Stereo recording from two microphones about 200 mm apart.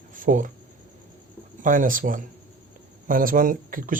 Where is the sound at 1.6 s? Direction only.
40° right (ahead or behind).